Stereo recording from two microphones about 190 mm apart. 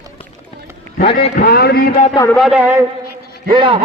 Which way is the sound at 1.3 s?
50° left (ahead or behind).